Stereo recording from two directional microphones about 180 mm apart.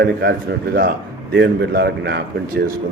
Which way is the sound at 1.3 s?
75° right (ahead or behind).